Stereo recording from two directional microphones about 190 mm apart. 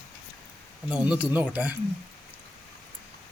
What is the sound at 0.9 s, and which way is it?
Speech, 5° right (ahead or behind).